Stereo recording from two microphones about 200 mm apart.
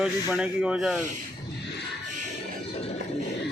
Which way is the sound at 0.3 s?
5° right (ahead or behind).